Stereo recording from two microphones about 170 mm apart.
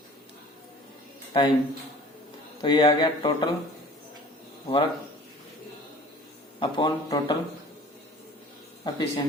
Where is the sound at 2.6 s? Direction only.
25° left (ahead or behind).